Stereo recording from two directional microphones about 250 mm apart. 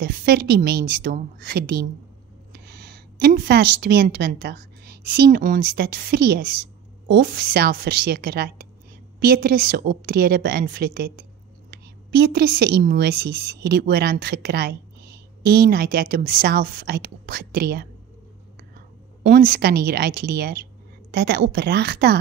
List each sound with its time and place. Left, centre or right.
0.0 s a woman's voice: right
19.2 s a woman's voice: right